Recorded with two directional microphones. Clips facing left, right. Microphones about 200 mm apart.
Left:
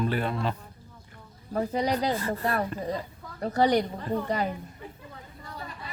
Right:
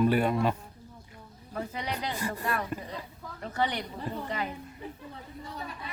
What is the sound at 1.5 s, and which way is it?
Speech, 35° left (ahead or behind).